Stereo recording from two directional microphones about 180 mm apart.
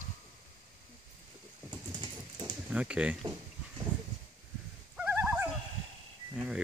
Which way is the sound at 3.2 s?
25° right (ahead or behind).